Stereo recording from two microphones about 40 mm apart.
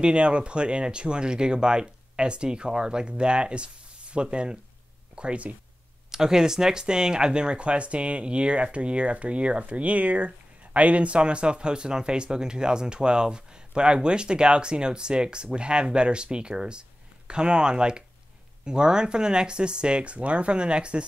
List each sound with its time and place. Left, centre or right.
0.0 s speech: right
6.1 s speech: centre